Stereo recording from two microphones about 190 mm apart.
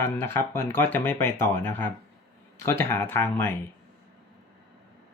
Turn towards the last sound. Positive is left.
turn(degrees=10)  # may be behind; listen again after turning